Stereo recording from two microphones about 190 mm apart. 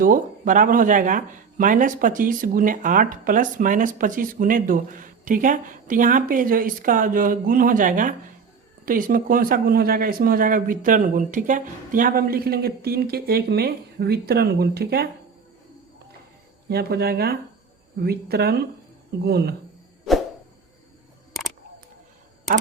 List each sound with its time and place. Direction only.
0.0 s speech: 45° right (ahead or behind)
16.6 s speech: 55° right (ahead or behind)